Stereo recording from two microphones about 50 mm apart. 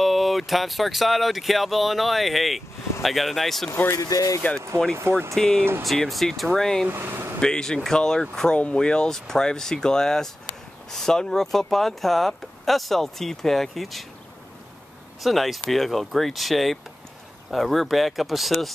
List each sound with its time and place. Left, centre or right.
0.0 s speech: centre
4.4 s speech: left
4.9 s speech: right
5.3 s speech: centre
6.9 s speech: right
7.3 s speech: centre
15.2 s speech: centre